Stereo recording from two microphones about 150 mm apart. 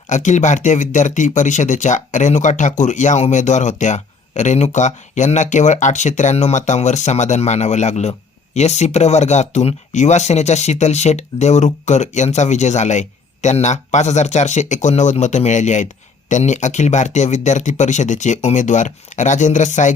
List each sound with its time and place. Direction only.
0.1 s speech: 50° left (ahead or behind)